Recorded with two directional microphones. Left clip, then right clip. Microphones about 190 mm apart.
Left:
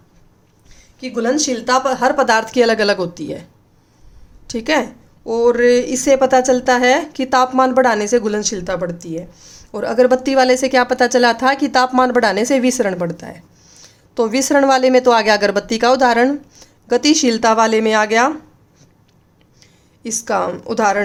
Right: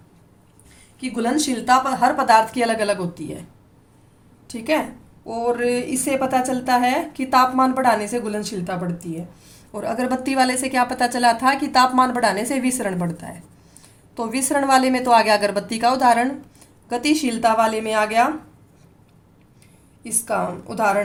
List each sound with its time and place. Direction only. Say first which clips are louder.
0.9 s a woman's voice: left 4 dB; 25° left (ahead or behind); by 3.4 s 45° left (ahead or behind)
4.4 s a woman's voice: left 5 dB; 45° left (ahead or behind)
20.0 s speech: left 5 dB; 50° left (ahead or behind)